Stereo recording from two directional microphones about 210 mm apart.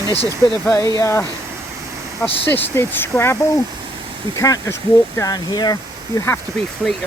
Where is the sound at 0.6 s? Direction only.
10° left (ahead or behind).